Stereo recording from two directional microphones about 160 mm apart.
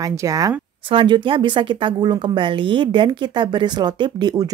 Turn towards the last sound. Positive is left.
turn(degrees=-25)  # may be behind; listen again after turning